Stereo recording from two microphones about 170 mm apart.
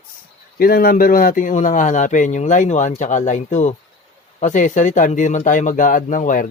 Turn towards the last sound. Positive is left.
turn(degrees=50)  # may be behind; listen again after turning